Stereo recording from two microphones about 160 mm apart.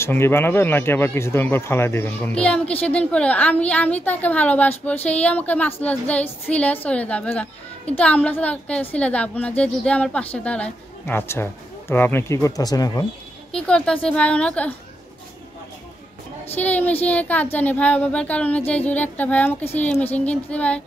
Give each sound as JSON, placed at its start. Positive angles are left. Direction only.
{"t": 0.0, "sound": "speech", "side_deg": 15}
{"t": 13.5, "sound": "speech", "side_deg": 5}
{"t": 16.5, "sound": "speech", "side_deg": 10}